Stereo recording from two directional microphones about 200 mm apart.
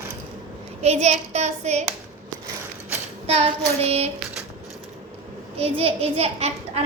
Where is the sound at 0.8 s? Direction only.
35° right (ahead or behind).